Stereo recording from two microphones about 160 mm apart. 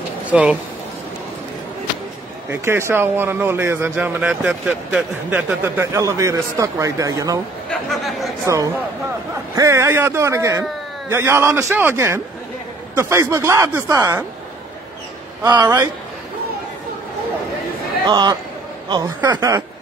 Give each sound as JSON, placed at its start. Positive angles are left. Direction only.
{"t": 0.3, "sound": "speech", "side_deg": -10}
{"t": 2.5, "sound": "a man's voice", "side_deg": -15}
{"t": 7.7, "sound": "speech", "side_deg": 0}
{"t": 9.6, "sound": "a man's voice", "side_deg": -20}
{"t": 15.4, "sound": "speech", "side_deg": -25}
{"t": 18.0, "sound": "speech", "side_deg": -25}